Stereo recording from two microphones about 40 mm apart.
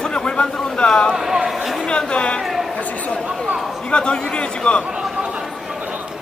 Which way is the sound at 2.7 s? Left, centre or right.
Left.